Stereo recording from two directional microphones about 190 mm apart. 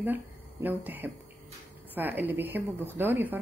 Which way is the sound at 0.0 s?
10° right (ahead or behind).